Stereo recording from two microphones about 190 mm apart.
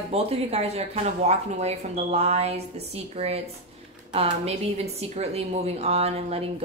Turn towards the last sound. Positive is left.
turn(degrees=-30)  # may be behind; listen again after turning